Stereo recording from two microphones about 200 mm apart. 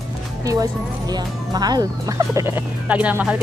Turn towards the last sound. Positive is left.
turn(degrees=-5)  # may be behind; listen again after turning